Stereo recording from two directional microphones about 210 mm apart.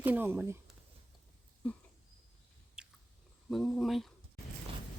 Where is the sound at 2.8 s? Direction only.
5° right (ahead or behind).